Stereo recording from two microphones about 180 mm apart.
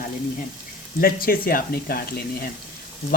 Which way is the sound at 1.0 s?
55° left (ahead or behind).